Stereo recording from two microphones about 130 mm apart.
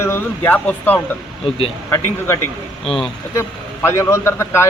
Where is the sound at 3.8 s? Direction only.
20° left (ahead or behind).